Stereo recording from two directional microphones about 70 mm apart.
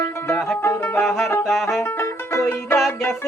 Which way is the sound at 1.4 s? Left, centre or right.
Centre.